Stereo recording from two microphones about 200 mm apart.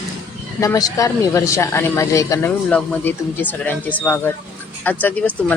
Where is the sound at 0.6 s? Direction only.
15° left (ahead or behind).